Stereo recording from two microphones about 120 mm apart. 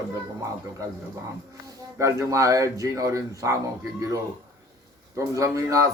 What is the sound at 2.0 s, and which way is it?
Speech, 25° right (ahead or behind).